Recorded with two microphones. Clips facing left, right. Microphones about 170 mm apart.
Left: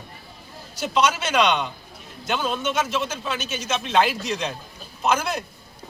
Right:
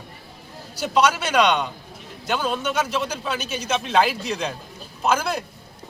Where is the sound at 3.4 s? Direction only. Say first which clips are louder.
Right 1 dB; 35° right (ahead or behind).